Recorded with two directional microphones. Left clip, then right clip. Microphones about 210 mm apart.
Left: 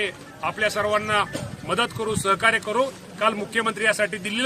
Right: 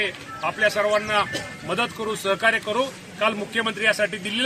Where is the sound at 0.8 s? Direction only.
25° left (ahead or behind).